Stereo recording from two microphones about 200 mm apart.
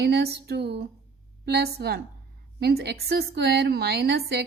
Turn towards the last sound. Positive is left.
turn(degrees=-55)  # may be behind; listen again after turning